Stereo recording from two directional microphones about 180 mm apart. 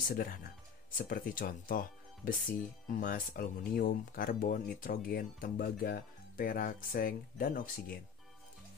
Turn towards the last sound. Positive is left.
turn(degrees=50)  # may be behind; listen again after turning